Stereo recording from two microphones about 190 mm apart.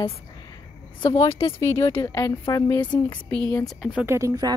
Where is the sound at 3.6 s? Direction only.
5° right (ahead or behind).